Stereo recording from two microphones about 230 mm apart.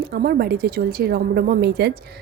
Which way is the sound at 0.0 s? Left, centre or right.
Right.